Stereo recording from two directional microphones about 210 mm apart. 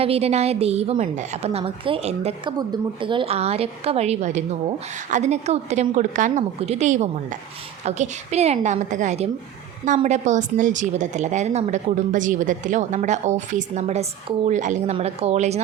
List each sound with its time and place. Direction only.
0.0 s a woman's voice: 30° right (ahead or behind)